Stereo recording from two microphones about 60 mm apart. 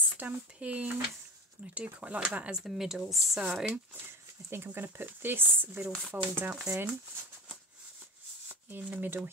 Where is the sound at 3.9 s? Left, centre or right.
Right.